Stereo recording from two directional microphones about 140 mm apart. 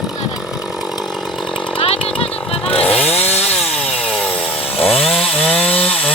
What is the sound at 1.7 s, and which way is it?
Chainsaw, 40° left (ahead or behind).